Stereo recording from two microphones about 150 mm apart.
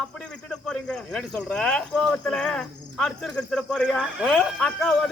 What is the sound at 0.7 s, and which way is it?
Speech, 5° left (ahead or behind).